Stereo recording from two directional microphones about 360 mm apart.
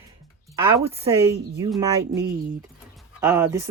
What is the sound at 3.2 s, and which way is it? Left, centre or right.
Speech, centre.